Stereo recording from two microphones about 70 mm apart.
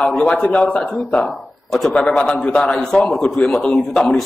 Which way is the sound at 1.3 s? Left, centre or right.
Centre.